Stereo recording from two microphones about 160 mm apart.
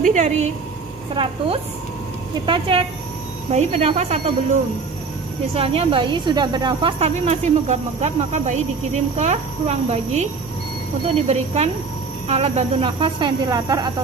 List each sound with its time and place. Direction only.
0.0 s speech: 45° right (ahead or behind)
1.1 s speech: 30° right (ahead or behind)
3.5 s a woman's voice: 45° right (ahead or behind)
5.5 s a woman's voice: 35° right (ahead or behind)
11.2 s speech: 40° right (ahead or behind); by 13.9 s 25° right (ahead or behind)